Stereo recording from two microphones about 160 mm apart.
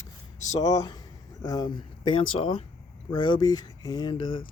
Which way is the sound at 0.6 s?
25° left (ahead or behind).